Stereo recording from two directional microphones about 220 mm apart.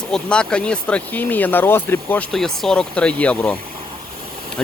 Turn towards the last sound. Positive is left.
turn(degrees=5)  # may be behind; listen again after turning